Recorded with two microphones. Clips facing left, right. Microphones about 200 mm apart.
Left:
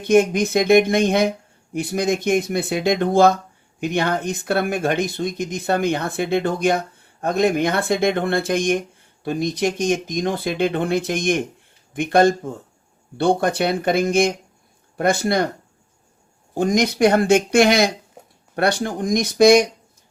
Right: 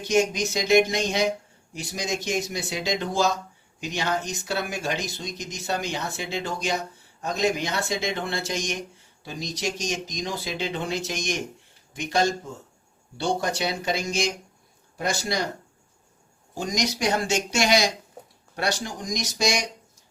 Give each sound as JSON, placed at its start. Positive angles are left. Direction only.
{"t": 0.0, "sound": "speech", "side_deg": 55}
{"t": 16.6, "sound": "speech", "side_deg": 55}